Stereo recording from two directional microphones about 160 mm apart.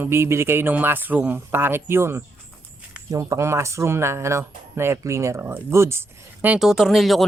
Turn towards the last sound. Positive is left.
turn(degrees=0)  # may be behind; listen again after turning